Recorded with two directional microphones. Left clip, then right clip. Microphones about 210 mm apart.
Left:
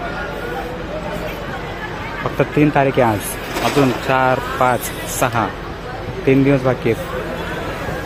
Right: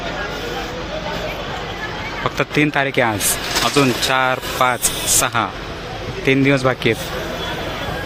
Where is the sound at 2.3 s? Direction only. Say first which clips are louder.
Left 3 dB; 5° right (ahead or behind).